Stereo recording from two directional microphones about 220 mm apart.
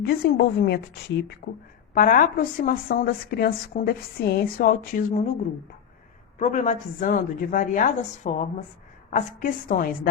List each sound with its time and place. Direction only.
0.0 s a woman's voice: 45° left (ahead or behind)
6.4 s a woman's voice: 35° left (ahead or behind)